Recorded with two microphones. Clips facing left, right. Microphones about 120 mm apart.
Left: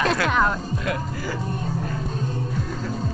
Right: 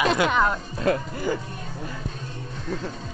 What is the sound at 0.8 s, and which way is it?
Speech, 30° right (ahead or behind).